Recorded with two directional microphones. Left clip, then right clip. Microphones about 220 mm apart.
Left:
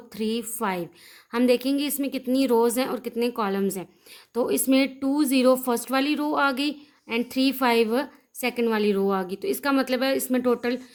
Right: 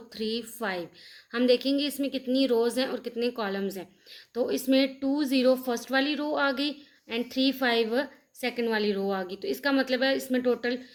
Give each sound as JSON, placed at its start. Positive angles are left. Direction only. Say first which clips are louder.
{"t": 0.1, "sound": "a woman's voice", "louder": "left 3 dB", "side_deg": 50}